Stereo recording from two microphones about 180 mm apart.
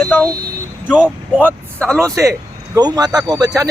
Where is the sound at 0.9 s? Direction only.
5° right (ahead or behind).